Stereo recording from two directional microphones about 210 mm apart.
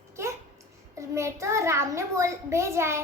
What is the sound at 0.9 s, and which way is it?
A child's voice, 15° right (ahead or behind).